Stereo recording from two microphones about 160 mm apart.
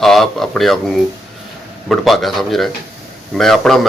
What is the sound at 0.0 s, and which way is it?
Speech, centre (ahead or behind).